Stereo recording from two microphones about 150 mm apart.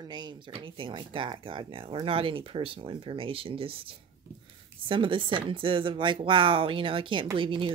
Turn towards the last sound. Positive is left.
turn(degrees=-35)  # may be behind; listen again after turning